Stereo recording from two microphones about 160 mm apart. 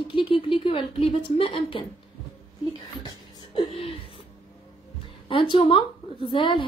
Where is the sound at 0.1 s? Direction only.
35° left (ahead or behind).